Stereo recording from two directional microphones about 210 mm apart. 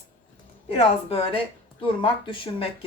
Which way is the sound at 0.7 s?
30° left (ahead or behind).